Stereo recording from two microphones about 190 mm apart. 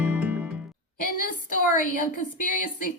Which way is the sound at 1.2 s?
45° left (ahead or behind).